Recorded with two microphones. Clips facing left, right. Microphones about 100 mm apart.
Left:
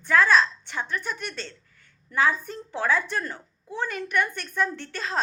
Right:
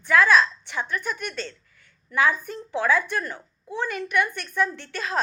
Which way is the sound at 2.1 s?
35° left (ahead or behind).